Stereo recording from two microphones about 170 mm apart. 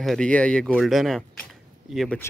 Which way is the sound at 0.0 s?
5° left (ahead or behind).